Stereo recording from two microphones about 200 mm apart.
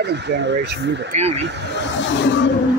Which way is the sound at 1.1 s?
35° right (ahead or behind).